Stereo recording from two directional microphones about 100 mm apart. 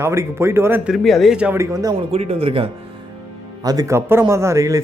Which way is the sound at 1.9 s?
80° right.